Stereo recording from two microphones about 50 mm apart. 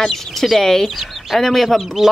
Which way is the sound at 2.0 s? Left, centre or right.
Centre.